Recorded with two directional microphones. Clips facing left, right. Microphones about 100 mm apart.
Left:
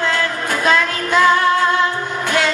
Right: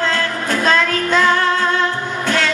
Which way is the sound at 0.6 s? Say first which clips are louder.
Even; 15° left (ahead or behind).